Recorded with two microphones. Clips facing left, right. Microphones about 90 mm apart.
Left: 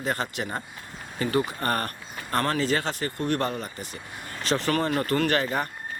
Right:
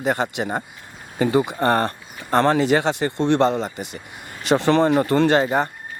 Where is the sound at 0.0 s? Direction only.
20° right (ahead or behind).